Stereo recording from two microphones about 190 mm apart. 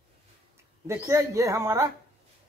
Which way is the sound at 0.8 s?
15° right (ahead or behind).